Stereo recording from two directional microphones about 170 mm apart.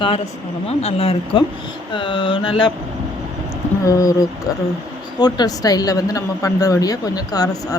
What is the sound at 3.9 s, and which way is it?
Speech, 20° left (ahead or behind).